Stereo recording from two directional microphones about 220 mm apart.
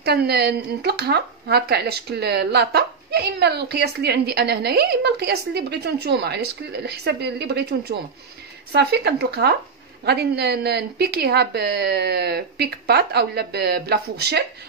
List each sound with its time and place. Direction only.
0.0 s speech: 45° right (ahead or behind)